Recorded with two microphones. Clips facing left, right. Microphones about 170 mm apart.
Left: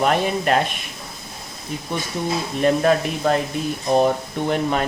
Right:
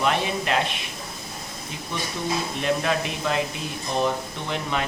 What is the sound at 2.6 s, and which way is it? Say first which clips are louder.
Speech: left 9 dB; 45° left (ahead or behind).